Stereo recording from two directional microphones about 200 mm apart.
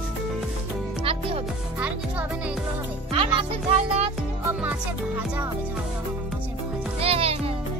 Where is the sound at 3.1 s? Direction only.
25° right (ahead or behind).